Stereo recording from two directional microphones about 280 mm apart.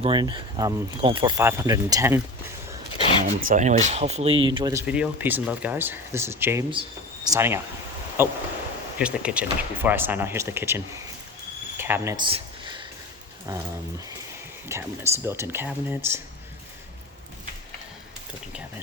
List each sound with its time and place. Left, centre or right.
0.0 s speech: centre
3.0 s a sound: centre
3.5 s speech: right; by 11.0 s centre
11.8 s a sound: centre
13.5 s speech: centre
14.7 s speech: centre